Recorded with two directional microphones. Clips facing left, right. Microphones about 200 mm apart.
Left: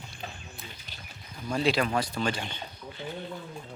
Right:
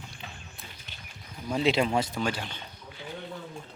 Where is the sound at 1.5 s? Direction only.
20° right (ahead or behind).